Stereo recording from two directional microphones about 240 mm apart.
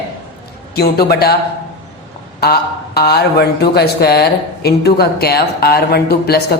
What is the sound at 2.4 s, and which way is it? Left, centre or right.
Speech, left.